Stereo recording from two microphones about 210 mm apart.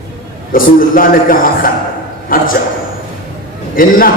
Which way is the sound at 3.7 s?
40° left (ahead or behind).